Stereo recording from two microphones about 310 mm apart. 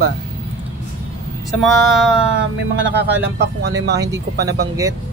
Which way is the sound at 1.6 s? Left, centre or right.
Centre.